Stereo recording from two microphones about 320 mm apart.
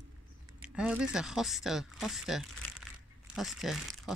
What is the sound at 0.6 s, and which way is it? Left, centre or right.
Speech, centre.